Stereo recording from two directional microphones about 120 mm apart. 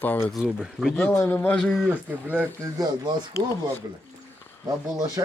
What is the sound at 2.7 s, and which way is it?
Speech, 35° right (ahead or behind).